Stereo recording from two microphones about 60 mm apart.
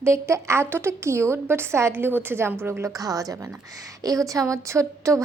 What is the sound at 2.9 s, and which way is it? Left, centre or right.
A woman's voice, right.